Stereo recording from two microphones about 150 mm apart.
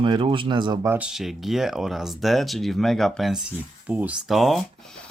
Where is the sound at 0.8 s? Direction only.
10° right (ahead or behind).